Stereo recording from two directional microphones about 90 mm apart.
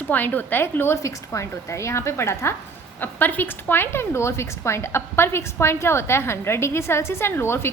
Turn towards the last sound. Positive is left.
turn(degrees=25)  # may be behind; listen again after turning